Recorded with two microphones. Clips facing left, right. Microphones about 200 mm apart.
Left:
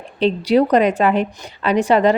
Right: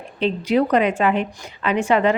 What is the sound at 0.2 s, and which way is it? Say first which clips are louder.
A woman's voice: left 4 dB; 35° left (ahead or behind).